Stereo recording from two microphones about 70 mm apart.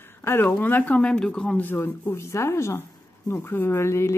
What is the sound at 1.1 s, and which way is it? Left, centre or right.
Speech, centre.